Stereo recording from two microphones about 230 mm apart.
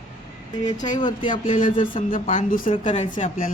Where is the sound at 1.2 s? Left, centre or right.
Left.